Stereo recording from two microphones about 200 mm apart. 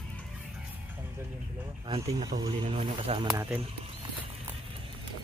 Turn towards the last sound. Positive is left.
turn(degrees=-25)  # may be behind; listen again after turning